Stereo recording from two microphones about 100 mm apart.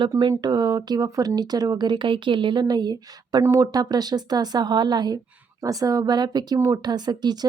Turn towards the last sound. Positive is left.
turn(degrees=-45)  # may be behind; listen again after turning